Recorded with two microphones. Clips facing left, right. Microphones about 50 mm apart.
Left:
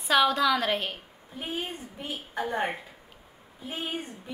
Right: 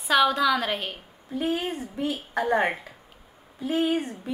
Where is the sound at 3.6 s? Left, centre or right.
Right.